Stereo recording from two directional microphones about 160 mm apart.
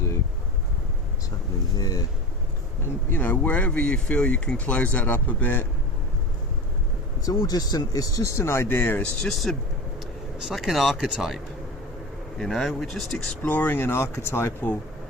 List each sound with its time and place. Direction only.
1.8 s speech: 25° left (ahead or behind)
2.8 s speech: 10° left (ahead or behind)
7.3 s speech: 25° left (ahead or behind); by 11.3 s 5° right (ahead or behind)
12.4 s speech: centre (ahead or behind)